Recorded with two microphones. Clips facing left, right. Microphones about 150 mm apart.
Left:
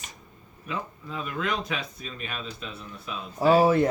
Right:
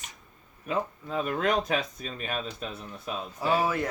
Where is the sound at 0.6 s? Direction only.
45° right (ahead or behind).